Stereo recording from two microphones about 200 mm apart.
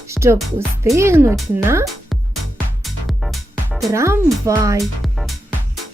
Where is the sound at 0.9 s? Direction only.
15° right (ahead or behind).